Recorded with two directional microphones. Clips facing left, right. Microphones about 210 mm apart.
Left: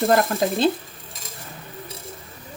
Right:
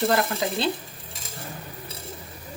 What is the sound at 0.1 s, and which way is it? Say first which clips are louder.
Speech: left 5 dB; 50° left (ahead or behind).